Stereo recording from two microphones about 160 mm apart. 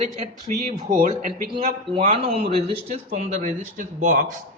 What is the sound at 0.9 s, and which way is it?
Speech, 55° right (ahead or behind).